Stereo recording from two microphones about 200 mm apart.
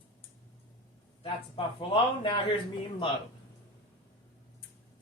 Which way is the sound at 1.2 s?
25° left (ahead or behind).